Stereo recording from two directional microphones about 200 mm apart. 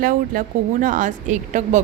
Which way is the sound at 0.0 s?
45° right (ahead or behind).